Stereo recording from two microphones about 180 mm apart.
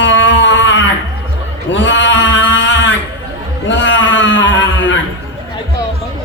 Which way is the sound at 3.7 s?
90° left.